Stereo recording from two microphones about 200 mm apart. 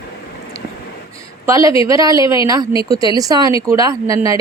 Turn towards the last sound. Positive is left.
turn(degrees=-15)  # may be behind; listen again after turning